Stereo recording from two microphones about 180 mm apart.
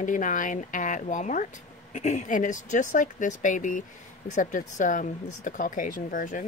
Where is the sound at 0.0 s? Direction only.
45° left (ahead or behind).